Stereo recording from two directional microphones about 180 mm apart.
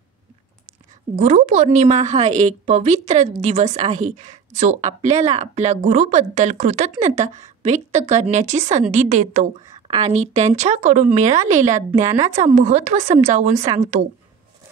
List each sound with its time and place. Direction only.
1.1 s speech: 40° right (ahead or behind)
9.8 s a sound: 25° right (ahead or behind)
10.1 s speech: 40° right (ahead or behind)